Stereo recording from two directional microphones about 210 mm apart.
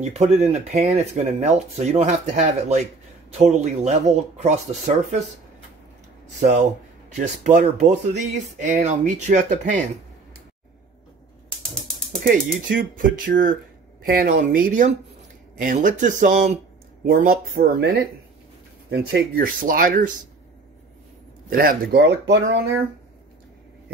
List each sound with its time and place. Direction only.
0.0 s speech: 30° right (ahead or behind)
7.2 s speech: 35° right (ahead or behind)
12.2 s speech: 40° right (ahead or behind)
18.9 s speech: 45° right (ahead or behind)
21.5 s speech: 45° right (ahead or behind)